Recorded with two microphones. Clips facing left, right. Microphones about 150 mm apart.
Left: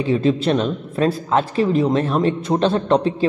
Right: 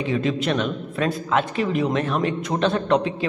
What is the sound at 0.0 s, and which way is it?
A man's voice, 30° left (ahead or behind).